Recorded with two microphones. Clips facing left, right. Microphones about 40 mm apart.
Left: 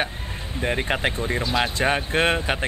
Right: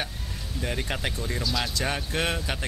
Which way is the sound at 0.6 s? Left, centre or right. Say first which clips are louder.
Left 7 dB; left.